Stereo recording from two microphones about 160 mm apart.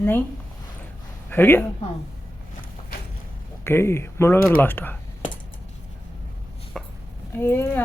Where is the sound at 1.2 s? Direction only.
15° left (ahead or behind).